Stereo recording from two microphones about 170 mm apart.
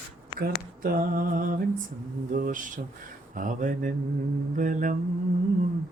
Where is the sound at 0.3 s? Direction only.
60° right (ahead or behind).